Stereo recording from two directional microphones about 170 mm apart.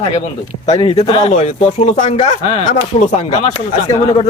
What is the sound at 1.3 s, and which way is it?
Speech, 40° left (ahead or behind).